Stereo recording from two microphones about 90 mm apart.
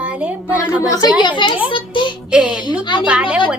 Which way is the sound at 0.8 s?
40° left (ahead or behind).